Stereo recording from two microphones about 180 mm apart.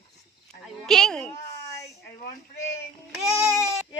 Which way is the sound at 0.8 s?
5° left (ahead or behind).